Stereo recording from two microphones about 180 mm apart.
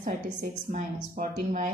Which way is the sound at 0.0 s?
45° right (ahead or behind).